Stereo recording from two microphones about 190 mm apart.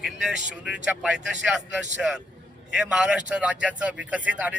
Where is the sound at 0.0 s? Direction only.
Centre (ahead or behind).